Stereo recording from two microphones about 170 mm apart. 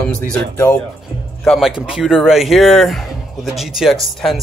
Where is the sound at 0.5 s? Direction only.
15° left (ahead or behind).